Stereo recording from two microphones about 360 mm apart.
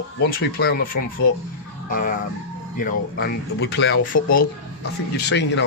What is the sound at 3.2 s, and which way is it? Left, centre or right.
Speech, left.